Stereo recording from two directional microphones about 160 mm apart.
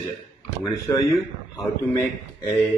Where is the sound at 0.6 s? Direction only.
20° left (ahead or behind).